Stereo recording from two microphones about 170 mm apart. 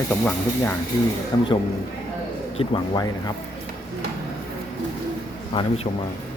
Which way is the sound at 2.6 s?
30° left (ahead or behind).